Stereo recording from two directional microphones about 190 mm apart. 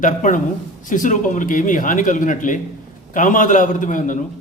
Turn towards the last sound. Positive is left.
turn(degrees=45)  # may be behind; listen again after turning